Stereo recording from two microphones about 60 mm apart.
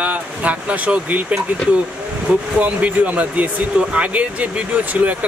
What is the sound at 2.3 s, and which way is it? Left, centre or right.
Speech, right.